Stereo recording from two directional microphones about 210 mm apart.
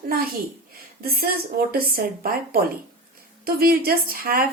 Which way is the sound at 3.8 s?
45° right (ahead or behind).